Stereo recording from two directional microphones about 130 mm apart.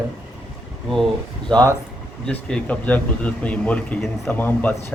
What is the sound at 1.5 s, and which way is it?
Speech, 30° right (ahead or behind).